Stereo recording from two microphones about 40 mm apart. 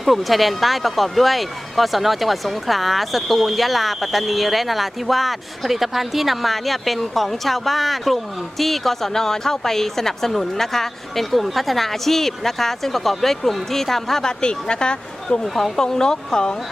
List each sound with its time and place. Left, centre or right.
0.0 s speech: centre; by 15.4 s left
15.5 s speech: centre
15.8 s speech: centre